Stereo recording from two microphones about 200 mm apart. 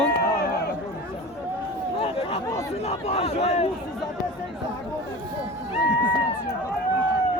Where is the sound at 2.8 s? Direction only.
30° left (ahead or behind).